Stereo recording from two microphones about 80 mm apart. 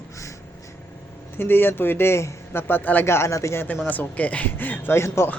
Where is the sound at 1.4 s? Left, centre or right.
Left.